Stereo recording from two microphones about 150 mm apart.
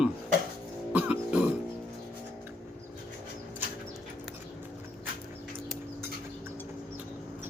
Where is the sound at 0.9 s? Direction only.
10° right (ahead or behind).